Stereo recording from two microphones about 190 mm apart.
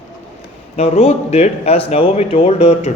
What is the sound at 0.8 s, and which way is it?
Speech, 35° left (ahead or behind).